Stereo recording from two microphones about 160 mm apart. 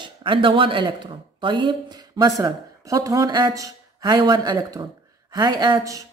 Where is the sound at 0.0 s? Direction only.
30° right (ahead or behind).